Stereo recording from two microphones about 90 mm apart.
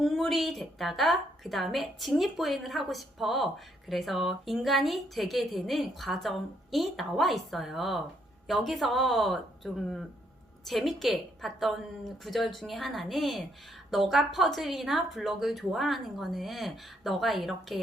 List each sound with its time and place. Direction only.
0.0 s a woman's voice: centre (ahead or behind)